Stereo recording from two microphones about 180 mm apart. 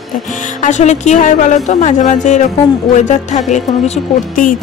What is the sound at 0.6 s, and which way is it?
A woman's voice, 40° left (ahead or behind).